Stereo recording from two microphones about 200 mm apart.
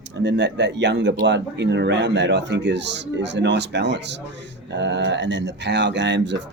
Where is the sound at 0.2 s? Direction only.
60° right (ahead or behind).